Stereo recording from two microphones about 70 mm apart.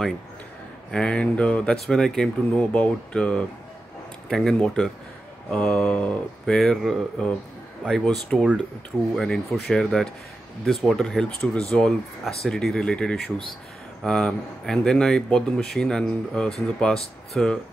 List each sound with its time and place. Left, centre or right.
0.9 s speech: centre
7.9 s speech: centre